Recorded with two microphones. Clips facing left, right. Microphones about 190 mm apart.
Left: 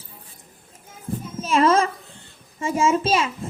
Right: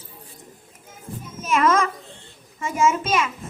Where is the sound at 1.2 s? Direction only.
30° left (ahead or behind).